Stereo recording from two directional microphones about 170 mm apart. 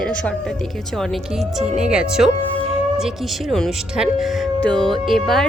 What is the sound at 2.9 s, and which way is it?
Speech, centre (ahead or behind).